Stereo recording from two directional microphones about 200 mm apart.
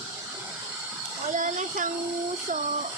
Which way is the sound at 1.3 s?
40° right (ahead or behind).